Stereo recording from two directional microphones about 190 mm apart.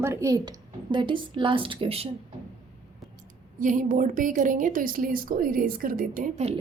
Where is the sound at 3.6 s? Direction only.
45° right (ahead or behind).